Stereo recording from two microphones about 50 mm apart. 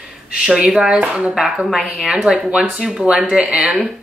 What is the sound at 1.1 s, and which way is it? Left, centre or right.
A woman's voice, centre.